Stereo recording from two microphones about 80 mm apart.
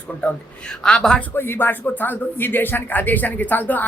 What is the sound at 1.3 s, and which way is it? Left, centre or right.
Speech, left.